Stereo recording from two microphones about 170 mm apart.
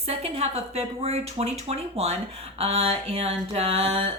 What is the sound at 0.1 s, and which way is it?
Speech, 35° right (ahead or behind).